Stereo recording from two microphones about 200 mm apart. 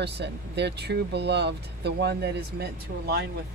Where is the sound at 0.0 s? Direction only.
60° right (ahead or behind).